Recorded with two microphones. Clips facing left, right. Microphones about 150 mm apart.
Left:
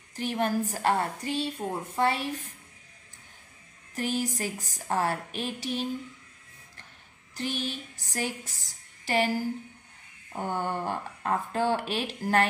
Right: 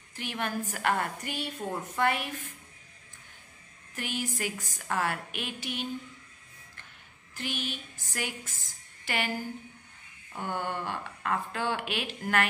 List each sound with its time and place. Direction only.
0.1 s a woman's voice: 35° left (ahead or behind)
3.9 s a woman's voice: 35° left (ahead or behind)
7.3 s a woman's voice: 35° left (ahead or behind)
10.3 s a woman's voice: 40° left (ahead or behind)